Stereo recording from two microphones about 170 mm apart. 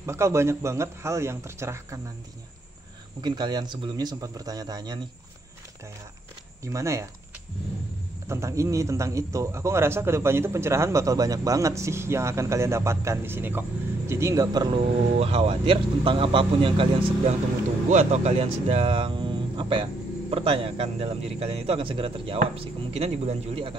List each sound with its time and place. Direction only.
0.0 s speech: 15° right (ahead or behind)
3.2 s a man's voice: 25° right (ahead or behind)
6.6 s speech: 15° right (ahead or behind)
8.3 s speech: 15° right (ahead or behind)
15.1 s speech: 35° right (ahead or behind)